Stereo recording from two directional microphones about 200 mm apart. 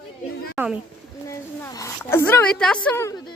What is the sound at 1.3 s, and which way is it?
Speech, 15° left (ahead or behind).